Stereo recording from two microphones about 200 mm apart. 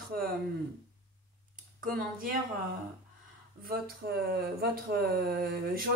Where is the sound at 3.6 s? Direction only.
50° right (ahead or behind).